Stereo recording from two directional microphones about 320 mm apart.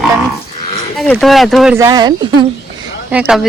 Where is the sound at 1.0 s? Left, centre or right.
Centre.